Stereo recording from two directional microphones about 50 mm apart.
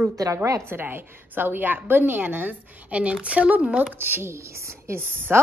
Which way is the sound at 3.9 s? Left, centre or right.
Right.